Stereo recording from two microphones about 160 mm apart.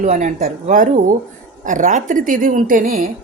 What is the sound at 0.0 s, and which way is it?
A woman's voice, 50° right (ahead or behind).